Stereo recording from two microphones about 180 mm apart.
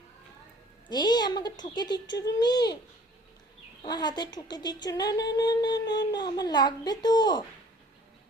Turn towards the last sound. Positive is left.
turn(degrees=25)  # may be behind; listen again after turning